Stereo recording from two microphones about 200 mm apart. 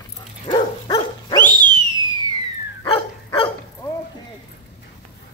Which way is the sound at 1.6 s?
25° right (ahead or behind).